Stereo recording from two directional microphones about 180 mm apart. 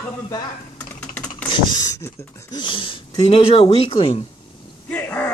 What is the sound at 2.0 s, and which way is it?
Speech, 15° left (ahead or behind).